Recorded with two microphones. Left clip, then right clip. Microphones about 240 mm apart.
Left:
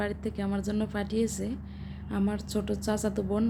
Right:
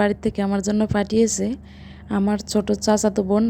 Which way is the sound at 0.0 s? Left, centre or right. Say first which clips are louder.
Right 12 dB; right.